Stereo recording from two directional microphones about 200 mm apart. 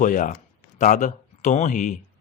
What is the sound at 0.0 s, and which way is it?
Speech, 40° left (ahead or behind).